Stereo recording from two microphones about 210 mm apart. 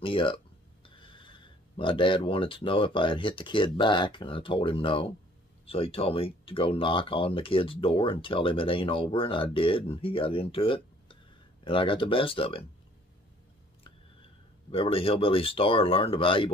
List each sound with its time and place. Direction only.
0.0 s speech: 25° left (ahead or behind)
14.7 s speech: 25° left (ahead or behind)